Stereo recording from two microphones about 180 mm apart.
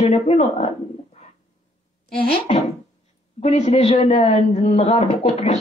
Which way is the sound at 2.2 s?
35° left (ahead or behind).